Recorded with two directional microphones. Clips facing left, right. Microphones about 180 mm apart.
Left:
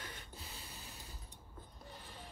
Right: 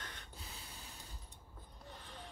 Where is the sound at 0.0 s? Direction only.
5° left (ahead or behind).